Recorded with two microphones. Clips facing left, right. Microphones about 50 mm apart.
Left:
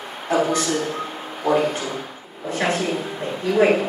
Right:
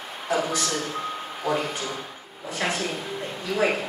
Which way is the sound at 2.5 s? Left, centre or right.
Centre.